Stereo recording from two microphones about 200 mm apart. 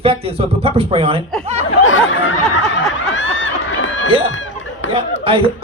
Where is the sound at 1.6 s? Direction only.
75° left (ahead or behind).